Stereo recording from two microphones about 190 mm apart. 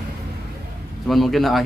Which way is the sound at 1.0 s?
Centre (ahead or behind).